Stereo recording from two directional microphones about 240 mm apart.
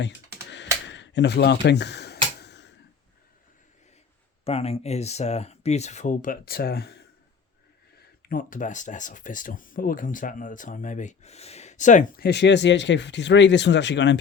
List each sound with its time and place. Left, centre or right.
0.9 s speech: left
2.4 s a sound: left
4.4 s speech: left